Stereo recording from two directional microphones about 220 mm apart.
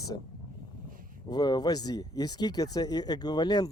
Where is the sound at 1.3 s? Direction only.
20° left (ahead or behind).